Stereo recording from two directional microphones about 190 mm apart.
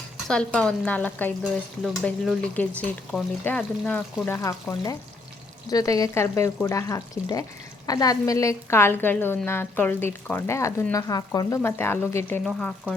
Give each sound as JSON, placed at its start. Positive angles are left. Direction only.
{"t": 0.3, "sound": "a woman's voice", "side_deg": 5}
{"t": 12.5, "sound": "frying", "side_deg": 5}